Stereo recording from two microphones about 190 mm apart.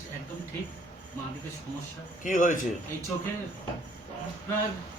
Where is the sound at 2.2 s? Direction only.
40° left (ahead or behind).